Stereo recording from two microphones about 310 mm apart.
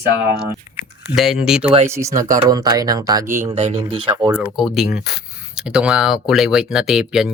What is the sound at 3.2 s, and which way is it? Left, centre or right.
Speech, right.